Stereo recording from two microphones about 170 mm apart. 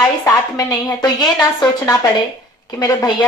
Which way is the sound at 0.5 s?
25° left (ahead or behind).